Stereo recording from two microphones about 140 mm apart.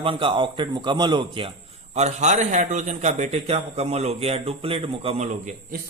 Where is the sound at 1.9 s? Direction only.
55° right (ahead or behind).